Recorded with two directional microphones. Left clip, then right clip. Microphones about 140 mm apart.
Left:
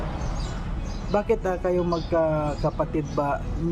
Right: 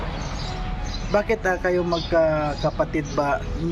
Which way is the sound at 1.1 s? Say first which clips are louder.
Right 2 dB; 15° left (ahead or behind).